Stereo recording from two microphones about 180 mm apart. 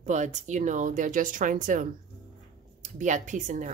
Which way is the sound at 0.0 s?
40° right (ahead or behind).